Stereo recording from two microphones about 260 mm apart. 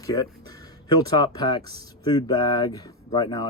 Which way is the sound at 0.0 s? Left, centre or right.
Centre.